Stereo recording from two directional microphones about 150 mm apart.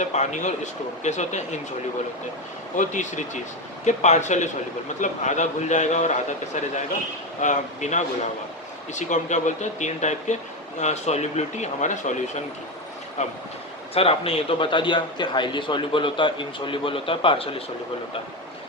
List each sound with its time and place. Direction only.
0.0 s speech: 50° left (ahead or behind)
2.7 s speech: 55° left (ahead or behind)
13.2 s speech: 50° left (ahead or behind)